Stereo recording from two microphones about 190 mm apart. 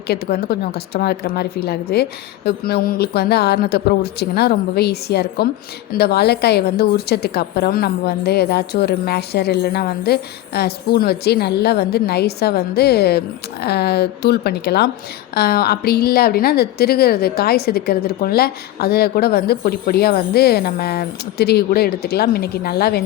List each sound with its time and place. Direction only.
0.1 s a woman's voice: 55° left (ahead or behind)